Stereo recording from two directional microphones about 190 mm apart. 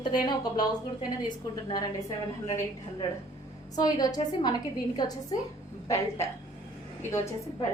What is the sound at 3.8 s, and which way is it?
A woman's voice, 20° left (ahead or behind).